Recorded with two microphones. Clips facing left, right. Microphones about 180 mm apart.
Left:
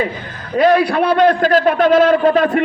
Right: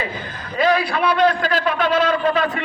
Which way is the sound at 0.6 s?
55° left (ahead or behind).